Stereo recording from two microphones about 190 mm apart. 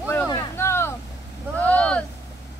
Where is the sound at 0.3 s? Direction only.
15° left (ahead or behind).